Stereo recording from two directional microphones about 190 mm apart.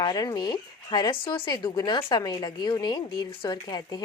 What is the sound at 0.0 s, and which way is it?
Speech, 20° left (ahead or behind).